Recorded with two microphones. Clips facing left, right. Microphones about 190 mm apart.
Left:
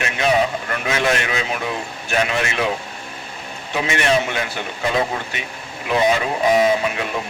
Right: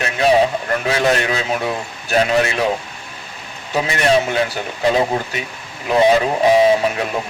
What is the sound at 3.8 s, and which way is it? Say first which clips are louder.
Speech: right 2 dB; 35° right (ahead or behind).